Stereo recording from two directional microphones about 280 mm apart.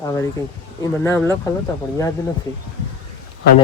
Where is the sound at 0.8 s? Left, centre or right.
Centre.